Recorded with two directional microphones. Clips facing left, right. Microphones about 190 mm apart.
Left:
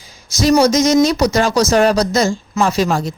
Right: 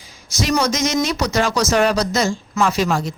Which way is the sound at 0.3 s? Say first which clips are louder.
Left 7 dB; 35° left (ahead or behind).